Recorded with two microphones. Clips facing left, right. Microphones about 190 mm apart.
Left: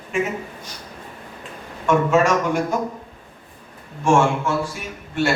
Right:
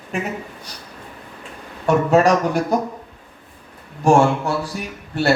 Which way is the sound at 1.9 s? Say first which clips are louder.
Right 2 dB; 35° right (ahead or behind).